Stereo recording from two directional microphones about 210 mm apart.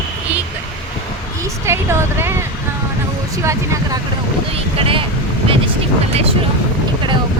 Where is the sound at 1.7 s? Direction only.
10° right (ahead or behind).